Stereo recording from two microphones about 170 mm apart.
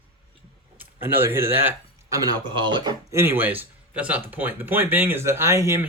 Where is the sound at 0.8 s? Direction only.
10° right (ahead or behind); by 2.9 s 30° right (ahead or behind).